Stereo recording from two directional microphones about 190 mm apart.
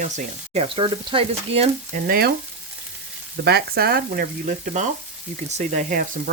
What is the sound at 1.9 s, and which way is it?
Frying, 50° right (ahead or behind).